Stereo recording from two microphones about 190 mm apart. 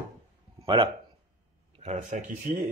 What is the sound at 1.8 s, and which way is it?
Speech, 40° right (ahead or behind).